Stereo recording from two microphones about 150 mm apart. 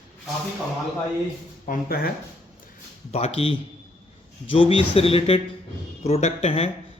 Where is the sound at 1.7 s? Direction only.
80° left.